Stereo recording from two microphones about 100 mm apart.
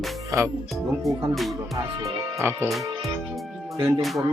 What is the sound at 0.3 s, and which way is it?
Speech, 30° right (ahead or behind).